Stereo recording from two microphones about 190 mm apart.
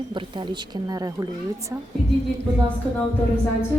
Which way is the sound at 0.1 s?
25° right (ahead or behind).